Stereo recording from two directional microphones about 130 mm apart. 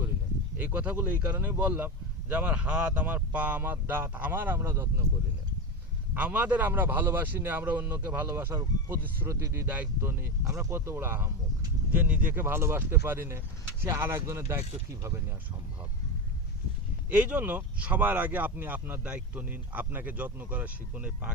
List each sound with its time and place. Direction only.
0.6 s a man's voice: 15° right (ahead or behind)
6.1 s a man's voice: 10° right (ahead or behind)
17.1 s a man's voice: 10° right (ahead or behind)